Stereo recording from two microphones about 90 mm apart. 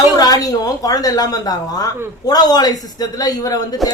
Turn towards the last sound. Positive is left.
turn(degrees=45)  # may be behind; listen again after turning